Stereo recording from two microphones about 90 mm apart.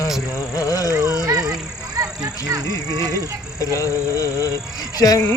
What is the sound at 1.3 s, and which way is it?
Honk, 40° right (ahead or behind).